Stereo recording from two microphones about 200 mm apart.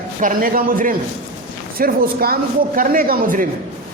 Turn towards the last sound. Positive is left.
turn(degrees=-45)  # may be behind; listen again after turning